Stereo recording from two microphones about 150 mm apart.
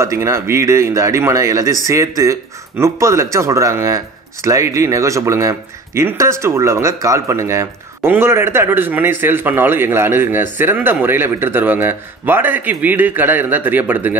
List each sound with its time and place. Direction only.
0.0 s speech: 20° right (ahead or behind)